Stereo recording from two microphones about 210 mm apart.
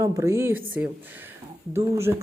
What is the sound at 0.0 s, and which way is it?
Speech, 15° right (ahead or behind).